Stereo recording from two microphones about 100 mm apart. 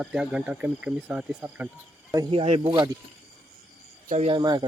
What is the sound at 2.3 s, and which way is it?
Speech, 75° right (ahead or behind).